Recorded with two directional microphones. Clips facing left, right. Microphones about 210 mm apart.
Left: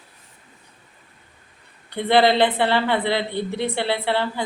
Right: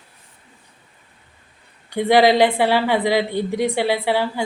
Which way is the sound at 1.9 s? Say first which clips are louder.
Right 3 dB; 10° right (ahead or behind).